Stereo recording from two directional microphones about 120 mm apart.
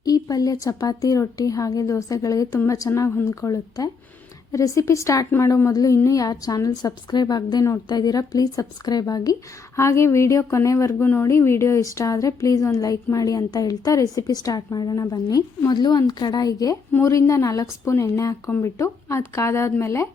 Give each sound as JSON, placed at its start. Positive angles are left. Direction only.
{"t": 0.0, "sound": "a woman's voice", "side_deg": 30}